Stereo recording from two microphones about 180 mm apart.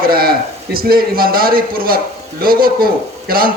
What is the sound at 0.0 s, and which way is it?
Speech, 55° right (ahead or behind).